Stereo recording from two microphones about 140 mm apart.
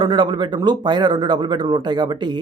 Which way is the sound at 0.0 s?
35° right (ahead or behind).